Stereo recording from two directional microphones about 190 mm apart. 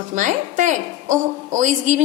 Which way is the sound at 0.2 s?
40° right (ahead or behind).